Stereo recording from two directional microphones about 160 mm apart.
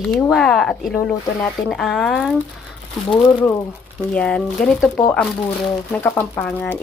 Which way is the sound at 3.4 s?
10° left (ahead or behind).